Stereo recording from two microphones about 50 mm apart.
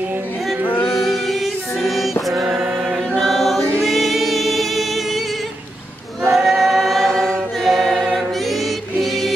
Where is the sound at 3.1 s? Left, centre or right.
Centre.